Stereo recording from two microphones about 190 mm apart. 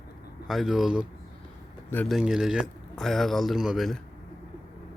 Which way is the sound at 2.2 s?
5° right (ahead or behind).